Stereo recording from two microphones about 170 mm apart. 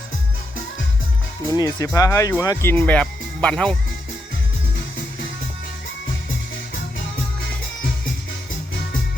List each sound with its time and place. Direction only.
1.5 s speech: 20° left (ahead or behind)